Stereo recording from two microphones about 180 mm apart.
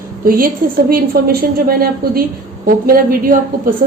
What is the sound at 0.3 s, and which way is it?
A woman's voice, 50° right (ahead or behind).